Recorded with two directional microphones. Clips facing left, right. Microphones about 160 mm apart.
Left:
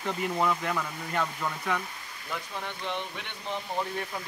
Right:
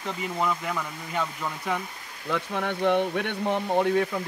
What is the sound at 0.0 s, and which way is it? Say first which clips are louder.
Speech: even; centre (ahead or behind).